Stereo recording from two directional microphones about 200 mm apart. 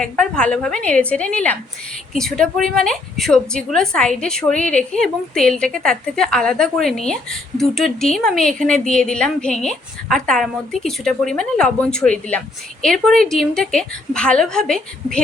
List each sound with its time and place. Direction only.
0.0 s a woman's voice: 5° left (ahead or behind)